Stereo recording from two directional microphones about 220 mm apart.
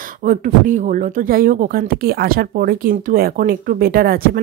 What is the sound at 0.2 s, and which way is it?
A woman's voice, 35° right (ahead or behind).